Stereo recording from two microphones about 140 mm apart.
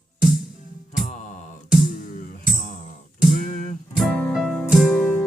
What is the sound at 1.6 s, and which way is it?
Music, 5° right (ahead or behind).